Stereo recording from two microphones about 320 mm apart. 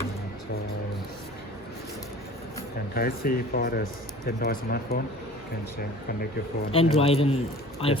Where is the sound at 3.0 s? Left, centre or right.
Left.